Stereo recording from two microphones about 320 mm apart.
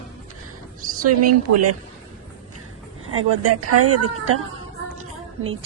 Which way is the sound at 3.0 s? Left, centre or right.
Right.